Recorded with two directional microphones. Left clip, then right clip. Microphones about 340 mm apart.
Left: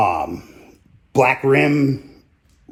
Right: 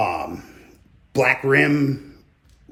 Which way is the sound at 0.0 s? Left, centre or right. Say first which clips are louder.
Left 5 dB; centre.